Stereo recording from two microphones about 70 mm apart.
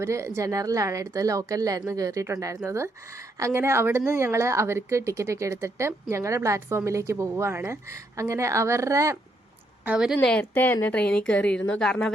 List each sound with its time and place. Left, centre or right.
0.0 s a woman's voice: right
10.5 s a woman's voice: left
10.8 s a woman's voice: centre